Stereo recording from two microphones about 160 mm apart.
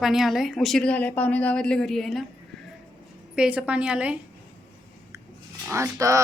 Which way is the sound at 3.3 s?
5° right (ahead or behind).